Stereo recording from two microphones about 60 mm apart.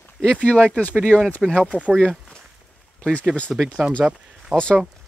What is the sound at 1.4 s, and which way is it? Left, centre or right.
Speech, centre.